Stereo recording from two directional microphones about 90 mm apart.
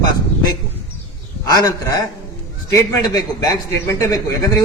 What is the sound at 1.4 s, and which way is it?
A man's voice, 45° left (ahead or behind).